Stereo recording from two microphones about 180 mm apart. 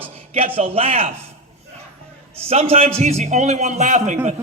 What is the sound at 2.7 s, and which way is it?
A man's voice, 35° right (ahead or behind).